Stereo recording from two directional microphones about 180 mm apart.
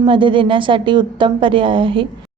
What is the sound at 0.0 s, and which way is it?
A woman's voice, 30° right (ahead or behind).